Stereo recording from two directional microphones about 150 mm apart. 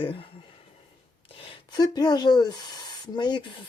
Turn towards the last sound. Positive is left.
turn(degrees=35)  # may be behind; listen again after turning